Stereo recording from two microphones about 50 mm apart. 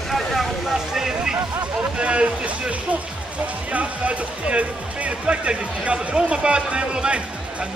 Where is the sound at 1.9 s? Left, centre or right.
Right.